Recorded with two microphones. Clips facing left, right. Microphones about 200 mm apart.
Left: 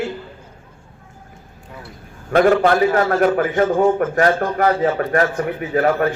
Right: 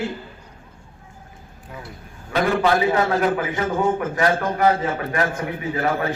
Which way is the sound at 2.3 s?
55° left (ahead or behind).